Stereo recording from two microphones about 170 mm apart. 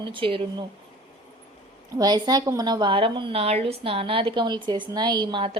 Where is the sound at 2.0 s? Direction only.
25° right (ahead or behind).